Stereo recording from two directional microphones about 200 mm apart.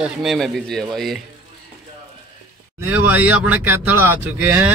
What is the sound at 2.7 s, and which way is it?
Speech, 10° right (ahead or behind).